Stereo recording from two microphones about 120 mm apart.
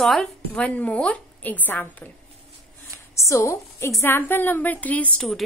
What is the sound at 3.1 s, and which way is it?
A woman's voice, 25° left (ahead or behind).